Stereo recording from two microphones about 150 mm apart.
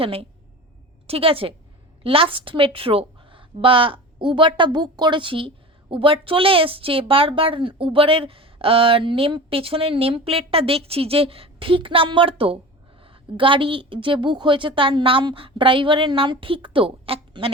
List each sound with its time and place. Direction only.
0.0 s speech: 40° right (ahead or behind)